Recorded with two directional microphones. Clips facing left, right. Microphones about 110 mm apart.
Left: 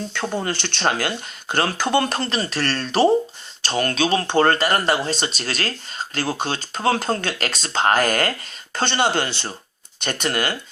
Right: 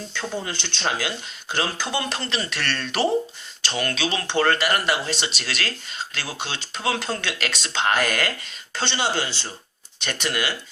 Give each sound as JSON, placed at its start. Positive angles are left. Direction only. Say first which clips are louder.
{"t": 0.1, "sound": "speech", "louder": "left 3 dB", "side_deg": 60}
{"t": 10.0, "sound": "speech", "louder": "left 3 dB", "side_deg": 45}